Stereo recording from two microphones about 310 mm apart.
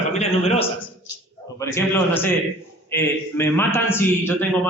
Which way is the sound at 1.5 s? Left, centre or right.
Centre.